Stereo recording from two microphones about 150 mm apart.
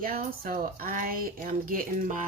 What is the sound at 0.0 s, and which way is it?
A woman's voice, 75° right (ahead or behind).